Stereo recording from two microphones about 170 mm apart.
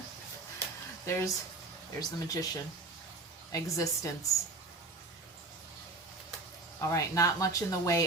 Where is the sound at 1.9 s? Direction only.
20° left (ahead or behind).